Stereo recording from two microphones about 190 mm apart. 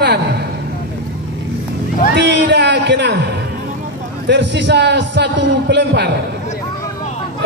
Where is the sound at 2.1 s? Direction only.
65° right (ahead or behind).